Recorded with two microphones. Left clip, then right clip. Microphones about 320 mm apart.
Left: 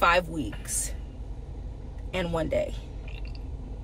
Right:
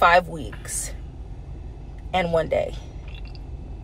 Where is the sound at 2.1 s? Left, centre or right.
Centre.